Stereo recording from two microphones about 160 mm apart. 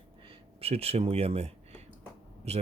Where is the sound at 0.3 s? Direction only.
40° right (ahead or behind).